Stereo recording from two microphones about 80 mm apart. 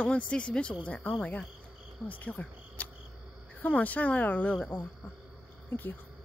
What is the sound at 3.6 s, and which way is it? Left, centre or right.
Speech, centre.